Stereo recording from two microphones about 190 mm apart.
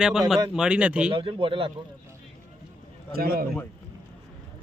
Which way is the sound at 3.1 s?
50° right (ahead or behind).